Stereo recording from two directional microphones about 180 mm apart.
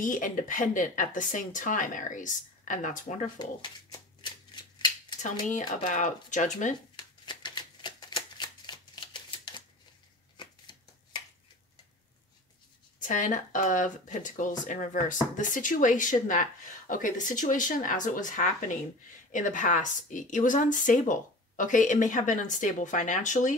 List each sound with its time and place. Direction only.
0.0 s speech: 45° left (ahead or behind)
5.2 s speech: 45° left (ahead or behind)
7.0 s shuffling cards: 25° left (ahead or behind)
13.0 s speech: 45° left (ahead or behind)